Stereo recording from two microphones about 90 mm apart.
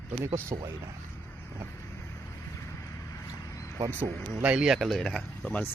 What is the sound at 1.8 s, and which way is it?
Vehicle, 30° left (ahead or behind).